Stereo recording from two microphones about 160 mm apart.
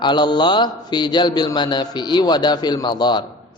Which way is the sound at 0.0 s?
30° left (ahead or behind).